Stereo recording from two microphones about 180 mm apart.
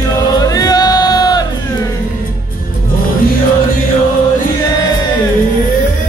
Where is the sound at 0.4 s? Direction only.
20° left (ahead or behind).